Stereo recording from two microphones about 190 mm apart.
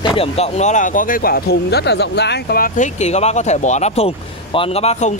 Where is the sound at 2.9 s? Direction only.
35° left (ahead or behind).